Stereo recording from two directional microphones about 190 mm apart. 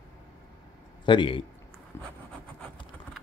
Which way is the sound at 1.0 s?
25° left (ahead or behind).